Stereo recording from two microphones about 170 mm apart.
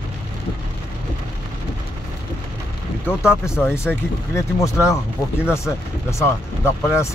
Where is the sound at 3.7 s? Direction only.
15° left (ahead or behind).